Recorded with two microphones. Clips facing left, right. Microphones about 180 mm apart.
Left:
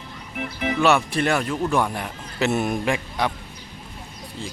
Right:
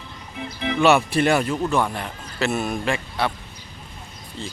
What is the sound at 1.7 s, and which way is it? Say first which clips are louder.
A man's voice: even; 15° left (ahead or behind).